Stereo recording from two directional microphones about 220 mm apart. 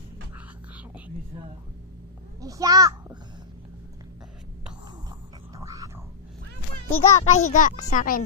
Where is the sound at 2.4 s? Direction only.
15° right (ahead or behind).